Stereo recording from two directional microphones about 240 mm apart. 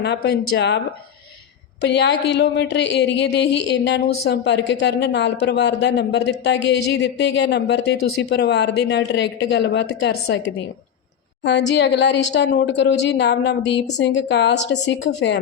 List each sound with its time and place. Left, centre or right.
0.0 s a woman's voice: left
1.8 s a woman's voice: left
11.4 s a woman's voice: left